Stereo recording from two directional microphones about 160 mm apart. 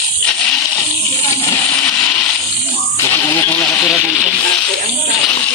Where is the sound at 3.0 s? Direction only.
15° left (ahead or behind).